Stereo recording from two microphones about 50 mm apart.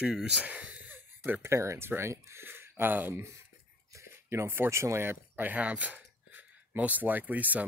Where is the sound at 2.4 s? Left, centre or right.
Right.